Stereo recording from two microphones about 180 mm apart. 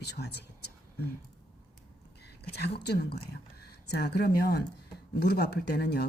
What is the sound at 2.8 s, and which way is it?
Speech, 60° left (ahead or behind).